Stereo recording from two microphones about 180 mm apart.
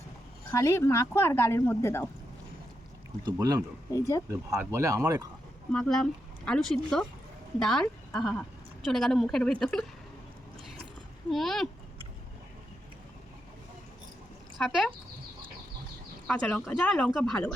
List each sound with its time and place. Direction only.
0.5 s a woman's voice: 15° left (ahead or behind)
3.2 s speech: 20° right (ahead or behind)
3.9 s a woman's voice: 15° left (ahead or behind)
4.5 s speech: 15° right (ahead or behind)
5.7 s speech: 5° left (ahead or behind)
11.3 s speech: centre (ahead or behind)
14.6 s speech: centre (ahead or behind)
16.2 s a woman's voice: 5° left (ahead or behind)